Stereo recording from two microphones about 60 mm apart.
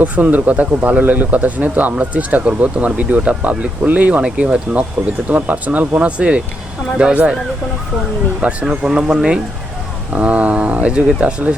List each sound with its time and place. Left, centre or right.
0.0 s speech: right
8.4 s speech: centre